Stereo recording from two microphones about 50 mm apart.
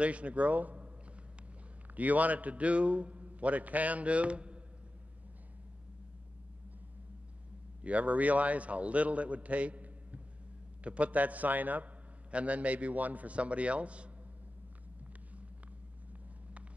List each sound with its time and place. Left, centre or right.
0.0 s a man's voice: right
2.0 s a man's voice: right
7.8 s a man's voice: right